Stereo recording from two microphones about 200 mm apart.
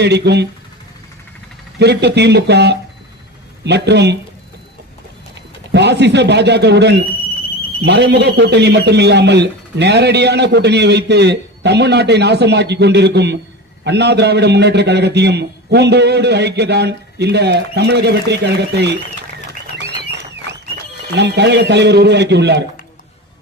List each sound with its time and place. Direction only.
0.0 s speech: 55° right (ahead or behind)
1.8 s speech: 60° right (ahead or behind)
5.7 s speech: 60° right (ahead or behind)
19.8 s a sound: 60° right (ahead or behind)
21.1 s speech: 60° right (ahead or behind)